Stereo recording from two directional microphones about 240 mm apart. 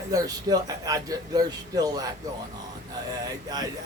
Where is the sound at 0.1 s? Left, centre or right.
Centre.